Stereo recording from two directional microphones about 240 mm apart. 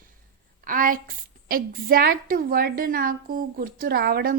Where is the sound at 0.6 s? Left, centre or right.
Right.